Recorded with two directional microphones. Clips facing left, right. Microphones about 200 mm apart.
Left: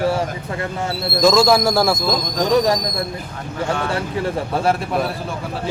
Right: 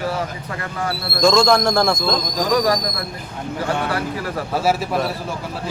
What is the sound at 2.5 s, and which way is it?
Speech, 25° left (ahead or behind).